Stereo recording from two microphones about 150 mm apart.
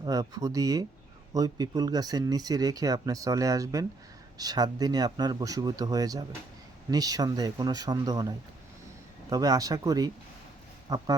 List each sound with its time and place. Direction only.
0.0 s speech: 25° right (ahead or behind)